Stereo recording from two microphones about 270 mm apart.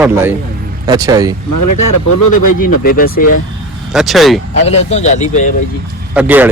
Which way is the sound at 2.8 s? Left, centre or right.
Left.